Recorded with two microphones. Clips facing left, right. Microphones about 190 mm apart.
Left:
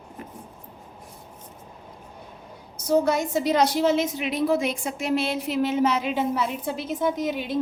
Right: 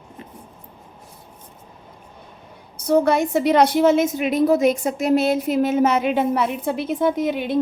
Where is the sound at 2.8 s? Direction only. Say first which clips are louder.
Right 4 dB; 60° right (ahead or behind).